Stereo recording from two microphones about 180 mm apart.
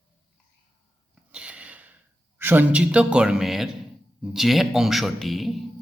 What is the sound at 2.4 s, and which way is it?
A man's voice, 10° right (ahead or behind).